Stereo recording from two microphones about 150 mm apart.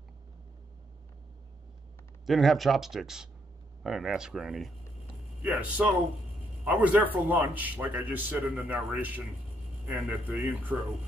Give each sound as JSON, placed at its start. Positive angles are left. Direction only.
{"t": 2.2, "sound": "a man's voice", "side_deg": 0}